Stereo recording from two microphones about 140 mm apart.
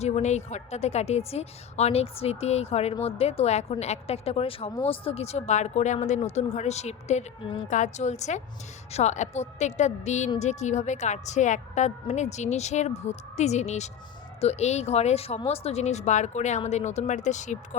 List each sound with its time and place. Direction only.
0.0 s a woman's voice: 55° left (ahead or behind)